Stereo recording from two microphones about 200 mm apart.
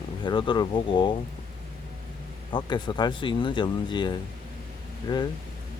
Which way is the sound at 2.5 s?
20° left (ahead or behind).